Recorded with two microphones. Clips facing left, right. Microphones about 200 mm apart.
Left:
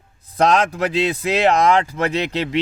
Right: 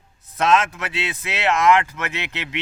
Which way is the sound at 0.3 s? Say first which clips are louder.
Left 2 dB; 35° left (ahead or behind).